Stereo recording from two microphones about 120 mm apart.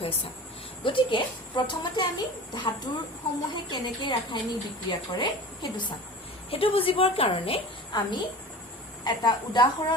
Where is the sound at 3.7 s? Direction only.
40° left (ahead or behind).